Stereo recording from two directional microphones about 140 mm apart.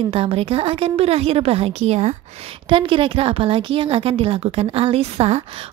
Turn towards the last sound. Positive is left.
turn(degrees=-45)  # may be behind; listen again after turning